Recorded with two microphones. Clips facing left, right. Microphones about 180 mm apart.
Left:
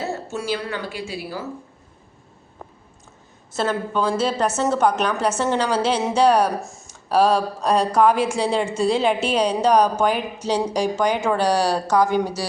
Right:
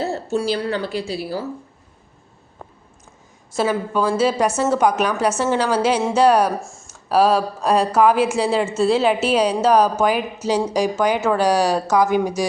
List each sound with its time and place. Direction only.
0.3 s a woman's voice: 35° right (ahead or behind)
3.5 s speech: 10° right (ahead or behind)